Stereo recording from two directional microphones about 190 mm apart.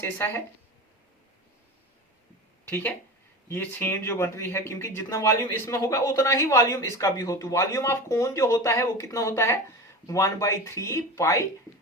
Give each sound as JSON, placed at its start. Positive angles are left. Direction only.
{"t": 0.0, "sound": "speech", "side_deg": 10}
{"t": 2.6, "sound": "speech", "side_deg": 10}